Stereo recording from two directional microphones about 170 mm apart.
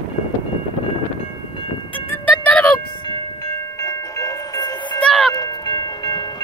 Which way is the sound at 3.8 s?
20° left (ahead or behind).